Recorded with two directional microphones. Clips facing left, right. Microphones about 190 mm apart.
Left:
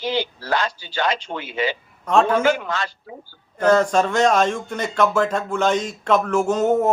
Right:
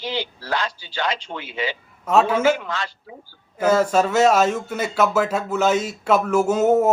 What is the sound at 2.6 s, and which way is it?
Speech, 50° left (ahead or behind).